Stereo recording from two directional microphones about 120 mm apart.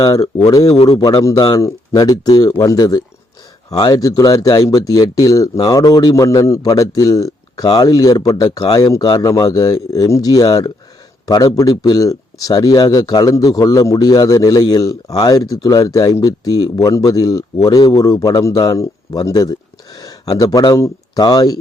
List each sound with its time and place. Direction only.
0.0 s speech: 30° left (ahead or behind)
0.7 s speech: 55° left (ahead or behind)
0.9 s speech: 40° left (ahead or behind)
1.2 s a man's voice: 30° left (ahead or behind)